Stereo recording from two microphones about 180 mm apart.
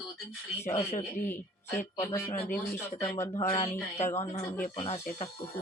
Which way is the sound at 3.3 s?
35° left (ahead or behind).